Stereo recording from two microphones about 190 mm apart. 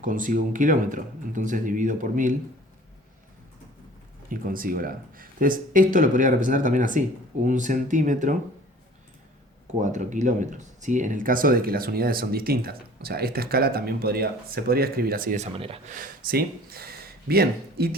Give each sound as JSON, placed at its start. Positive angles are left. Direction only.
{"t": 0.0, "sound": "speech", "side_deg": -45}
{"t": 4.3, "sound": "speech", "side_deg": -45}
{"t": 9.8, "sound": "speech", "side_deg": -40}
{"t": 15.5, "sound": "speech", "side_deg": -30}
{"t": 16.0, "sound": "speech", "side_deg": -50}